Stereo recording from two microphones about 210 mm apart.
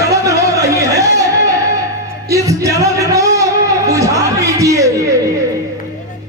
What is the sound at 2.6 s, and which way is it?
Music, 15° right (ahead or behind).